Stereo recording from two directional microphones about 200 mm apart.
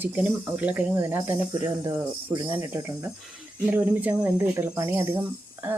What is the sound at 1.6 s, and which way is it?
Speech, 20° right (ahead or behind).